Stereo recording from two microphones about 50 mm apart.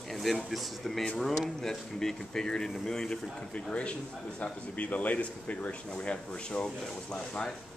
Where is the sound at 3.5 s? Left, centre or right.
Left.